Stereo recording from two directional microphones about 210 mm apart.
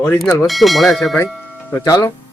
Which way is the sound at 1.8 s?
15° left (ahead or behind).